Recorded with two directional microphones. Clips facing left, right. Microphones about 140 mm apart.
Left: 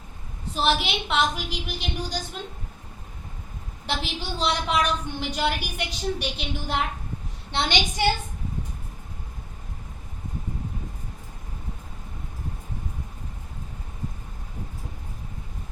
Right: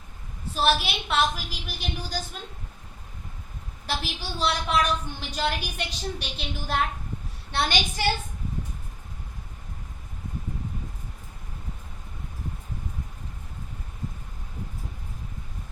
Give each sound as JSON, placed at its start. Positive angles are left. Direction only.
{"t": 0.5, "sound": "a woman's voice", "side_deg": 20}
{"t": 3.8, "sound": "a woman's voice", "side_deg": 20}